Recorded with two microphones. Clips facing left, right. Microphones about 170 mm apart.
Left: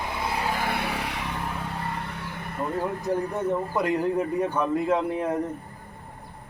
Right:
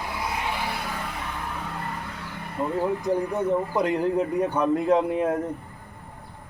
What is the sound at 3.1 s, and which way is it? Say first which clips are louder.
Speech: even; 40° left (ahead or behind).